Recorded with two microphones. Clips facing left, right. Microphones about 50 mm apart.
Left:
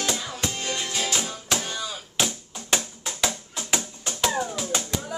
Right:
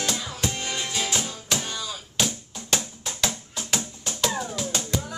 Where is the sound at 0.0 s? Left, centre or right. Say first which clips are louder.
Even; centre.